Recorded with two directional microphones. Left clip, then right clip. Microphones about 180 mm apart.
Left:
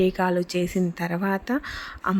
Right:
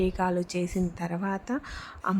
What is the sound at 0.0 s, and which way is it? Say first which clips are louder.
A woman's voice: left 5 dB; 15° left (ahead or behind).